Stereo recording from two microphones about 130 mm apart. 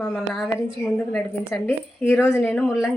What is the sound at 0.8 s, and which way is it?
Speech, 10° left (ahead or behind).